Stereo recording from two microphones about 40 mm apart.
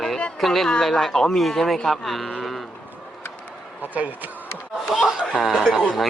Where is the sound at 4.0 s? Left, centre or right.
Right.